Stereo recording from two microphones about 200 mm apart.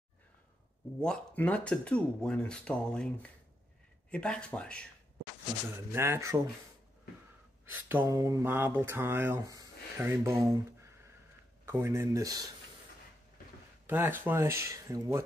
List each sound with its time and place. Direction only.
0.9 s speech: 5° left (ahead or behind)
5.9 s speech: 15° right (ahead or behind)
7.6 s speech: 10° right (ahead or behind)
13.8 s speech: 10° right (ahead or behind)